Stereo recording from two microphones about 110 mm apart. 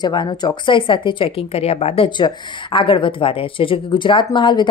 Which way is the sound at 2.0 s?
45° left (ahead or behind).